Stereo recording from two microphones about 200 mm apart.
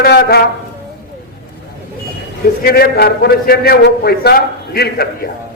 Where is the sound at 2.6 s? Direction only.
50° left (ahead or behind).